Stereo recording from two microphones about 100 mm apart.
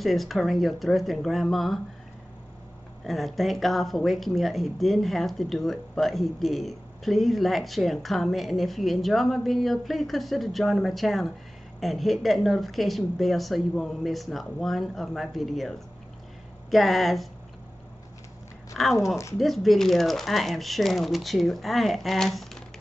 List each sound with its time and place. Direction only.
0.0 s speech: centre (ahead or behind)
3.0 s speech: centre (ahead or behind)
18.8 s speech: 5° left (ahead or behind)